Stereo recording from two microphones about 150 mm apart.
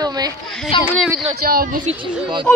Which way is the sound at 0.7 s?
35° left (ahead or behind).